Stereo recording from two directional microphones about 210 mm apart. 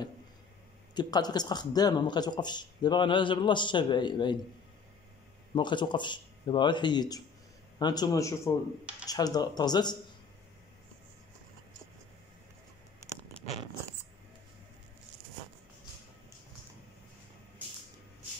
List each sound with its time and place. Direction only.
0.9 s speech: 20° left (ahead or behind)
5.5 s a man's voice: 20° left (ahead or behind)